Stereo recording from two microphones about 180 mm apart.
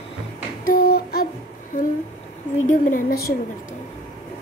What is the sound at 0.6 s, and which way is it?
Humming, 55° left (ahead or behind).